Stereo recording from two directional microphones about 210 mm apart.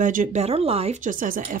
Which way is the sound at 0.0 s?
40° right (ahead or behind).